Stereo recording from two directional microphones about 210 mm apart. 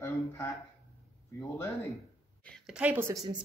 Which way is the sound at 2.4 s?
Centre (ahead or behind).